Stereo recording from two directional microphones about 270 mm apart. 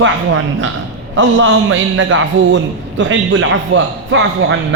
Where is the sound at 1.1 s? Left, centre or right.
Right.